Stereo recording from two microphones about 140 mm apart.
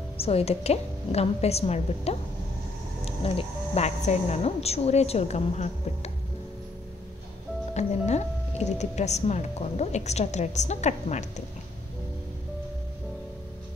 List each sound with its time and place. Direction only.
0.2 s a woman's voice: 45° left (ahead or behind)
7.7 s speech: 55° left (ahead or behind)